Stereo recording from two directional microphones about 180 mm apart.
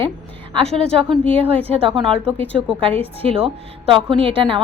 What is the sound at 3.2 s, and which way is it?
A woman's voice, 30° right (ahead or behind).